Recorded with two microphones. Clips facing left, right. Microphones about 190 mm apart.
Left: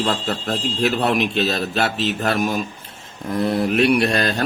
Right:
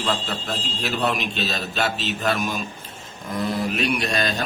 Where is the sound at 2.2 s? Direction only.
40° left (ahead or behind).